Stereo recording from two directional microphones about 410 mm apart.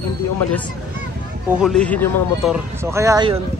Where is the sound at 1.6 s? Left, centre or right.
Centre.